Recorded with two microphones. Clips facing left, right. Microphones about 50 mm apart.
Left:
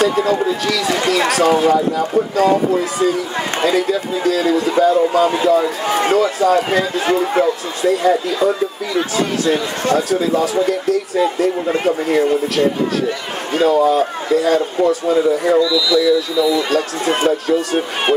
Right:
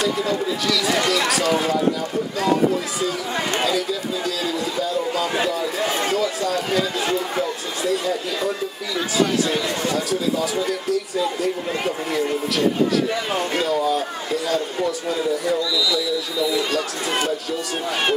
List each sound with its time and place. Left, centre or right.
0.0 s a sound: left
1.0 s a man's voice: left
3.6 s a man's voice: left
15.6 s speech: centre
16.7 s a man's voice: left